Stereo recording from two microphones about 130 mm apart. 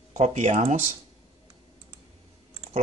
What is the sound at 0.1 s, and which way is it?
Speech, 65° right (ahead or behind).